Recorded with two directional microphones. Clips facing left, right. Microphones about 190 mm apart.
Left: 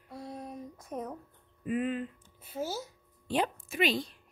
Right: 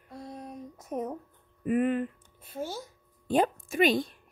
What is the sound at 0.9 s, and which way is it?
Speech, 15° right (ahead or behind).